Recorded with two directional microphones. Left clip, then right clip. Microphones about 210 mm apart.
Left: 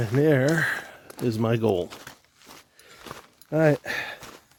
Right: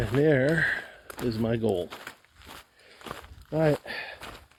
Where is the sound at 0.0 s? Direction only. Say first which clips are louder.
Left 2 dB; 35° left (ahead or behind).